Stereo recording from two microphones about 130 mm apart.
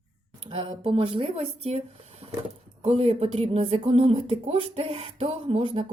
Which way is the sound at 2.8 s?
50° right (ahead or behind).